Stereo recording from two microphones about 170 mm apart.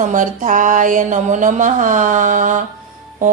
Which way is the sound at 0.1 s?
50° right (ahead or behind).